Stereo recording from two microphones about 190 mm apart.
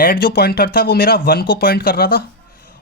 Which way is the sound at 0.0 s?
50° left (ahead or behind).